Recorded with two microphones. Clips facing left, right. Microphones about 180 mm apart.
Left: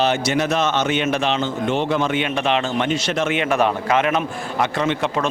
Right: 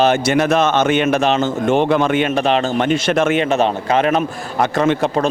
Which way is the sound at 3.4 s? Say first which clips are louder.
Right 3 dB; 25° right (ahead or behind).